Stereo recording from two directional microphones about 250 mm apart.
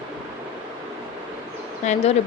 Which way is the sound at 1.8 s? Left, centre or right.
Left.